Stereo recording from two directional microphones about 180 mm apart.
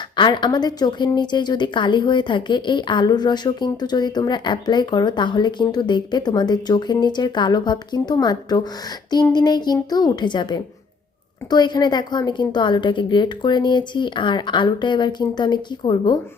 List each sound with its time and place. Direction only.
0.2 s a woman's voice: 25° left (ahead or behind)